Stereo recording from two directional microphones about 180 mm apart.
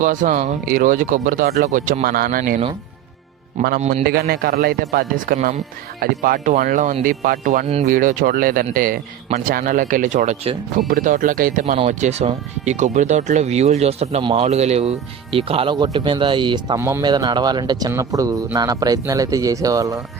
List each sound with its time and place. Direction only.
0.0 s a man's voice: 45° right (ahead or behind)
3.8 s speech: 40° right (ahead or behind)
4.0 s a man's voice: 60° right (ahead or behind)
11.6 s speech: 35° right (ahead or behind)
16.7 s speech: 15° right (ahead or behind)